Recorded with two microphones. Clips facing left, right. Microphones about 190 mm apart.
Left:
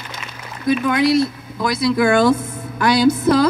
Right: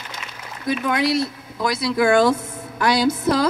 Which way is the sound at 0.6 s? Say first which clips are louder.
Left 5 dB; 30° right (ahead or behind).